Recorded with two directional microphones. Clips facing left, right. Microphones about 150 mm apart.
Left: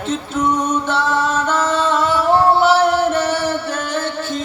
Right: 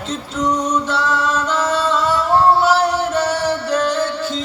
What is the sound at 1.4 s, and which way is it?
Music, 50° left (ahead or behind).